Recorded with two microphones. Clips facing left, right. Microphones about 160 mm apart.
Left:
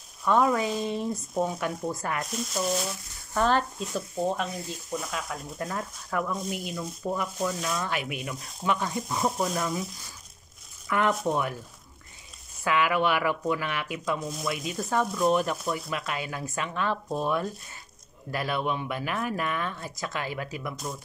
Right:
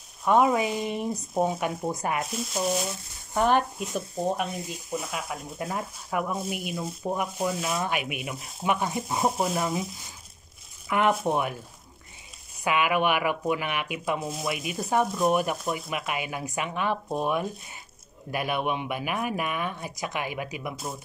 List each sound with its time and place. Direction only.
0.2 s speech: 20° right (ahead or behind)
2.3 s speech: centre (ahead or behind)
3.3 s speech: 15° right (ahead or behind)
6.8 s speech: 25° right (ahead or behind)
7.3 s speech: 10° right (ahead or behind)
12.6 s speech: 15° right (ahead or behind)